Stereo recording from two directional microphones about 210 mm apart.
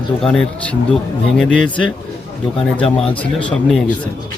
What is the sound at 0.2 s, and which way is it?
A man's voice, 5° left (ahead or behind).